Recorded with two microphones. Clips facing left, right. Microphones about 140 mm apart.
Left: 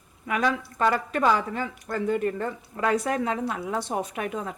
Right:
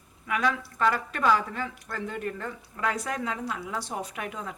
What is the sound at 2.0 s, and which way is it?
A woman's voice, 35° left (ahead or behind).